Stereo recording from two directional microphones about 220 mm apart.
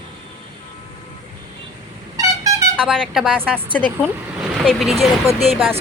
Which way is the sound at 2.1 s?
15° right (ahead or behind).